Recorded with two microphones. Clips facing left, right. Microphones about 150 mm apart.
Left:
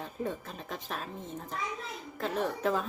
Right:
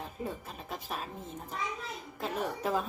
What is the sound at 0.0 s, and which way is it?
Speech, 5° right (ahead or behind).